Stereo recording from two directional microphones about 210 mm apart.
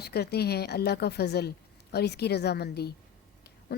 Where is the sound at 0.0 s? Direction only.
50° left (ahead or behind).